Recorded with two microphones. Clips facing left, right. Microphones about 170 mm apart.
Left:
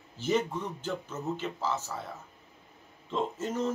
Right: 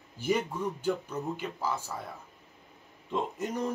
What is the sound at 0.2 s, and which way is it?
A man's voice, 10° right (ahead or behind).